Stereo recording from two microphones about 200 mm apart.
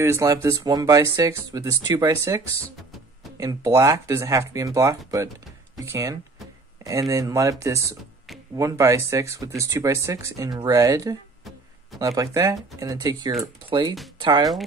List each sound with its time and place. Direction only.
0.0 s speech: 15° right (ahead or behind)
8.5 s speech: 15° right (ahead or behind)